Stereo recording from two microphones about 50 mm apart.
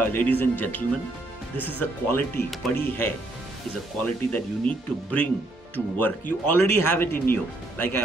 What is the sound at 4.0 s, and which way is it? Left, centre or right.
Speech, left.